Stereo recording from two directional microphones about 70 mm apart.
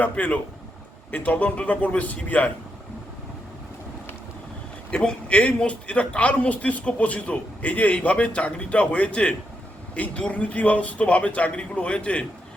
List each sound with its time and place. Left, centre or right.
0.0 s a man's voice: left
4.9 s a man's voice: centre